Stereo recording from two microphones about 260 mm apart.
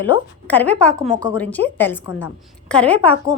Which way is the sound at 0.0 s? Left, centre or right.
Centre.